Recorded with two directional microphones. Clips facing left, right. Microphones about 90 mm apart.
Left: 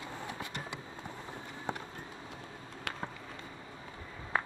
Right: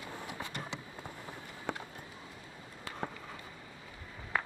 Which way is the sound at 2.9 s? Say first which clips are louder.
Left 3 dB; 75° left (ahead or behind).